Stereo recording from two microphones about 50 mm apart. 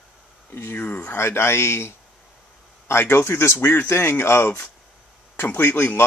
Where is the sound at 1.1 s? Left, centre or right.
Left.